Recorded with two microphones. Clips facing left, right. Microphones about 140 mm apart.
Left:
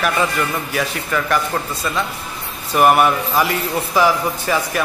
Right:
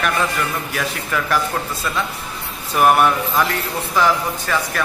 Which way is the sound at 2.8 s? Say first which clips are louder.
Left 1 dB; 5° left (ahead or behind).